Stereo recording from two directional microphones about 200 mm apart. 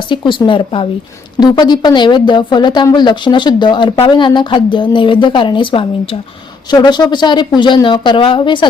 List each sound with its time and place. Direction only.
0.1 s speech: 25° left (ahead or behind)